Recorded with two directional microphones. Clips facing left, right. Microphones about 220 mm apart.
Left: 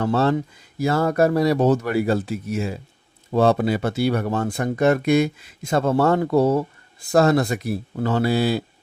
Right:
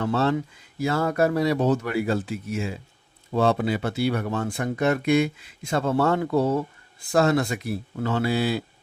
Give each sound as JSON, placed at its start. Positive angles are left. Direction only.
{"t": 0.0, "sound": "speech", "side_deg": 40}